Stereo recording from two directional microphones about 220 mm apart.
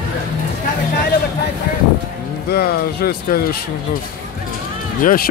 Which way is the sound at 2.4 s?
45° left (ahead or behind).